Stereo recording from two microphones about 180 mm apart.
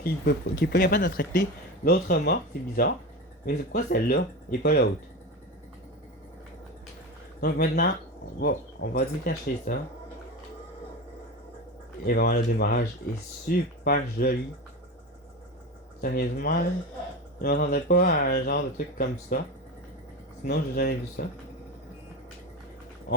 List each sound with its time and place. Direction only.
0.0 s speech: 60° left (ahead or behind)
7.4 s speech: 65° left (ahead or behind)
12.0 s speech: 60° left (ahead or behind)
16.0 s speech: 55° left (ahead or behind)
17.4 s speech: 65° left (ahead or behind)
20.4 s speech: 60° left (ahead or behind)